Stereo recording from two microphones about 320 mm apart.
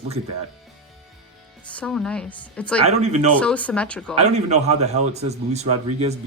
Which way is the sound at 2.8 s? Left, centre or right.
Centre.